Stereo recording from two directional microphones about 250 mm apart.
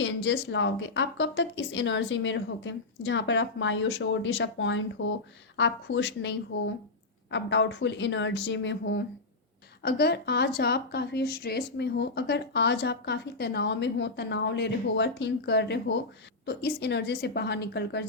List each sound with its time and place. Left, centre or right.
0.0 s a woman's voice: left